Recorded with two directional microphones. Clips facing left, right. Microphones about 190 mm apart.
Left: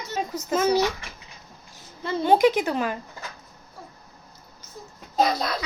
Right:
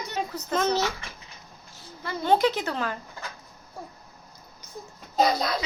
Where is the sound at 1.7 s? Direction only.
20° left (ahead or behind).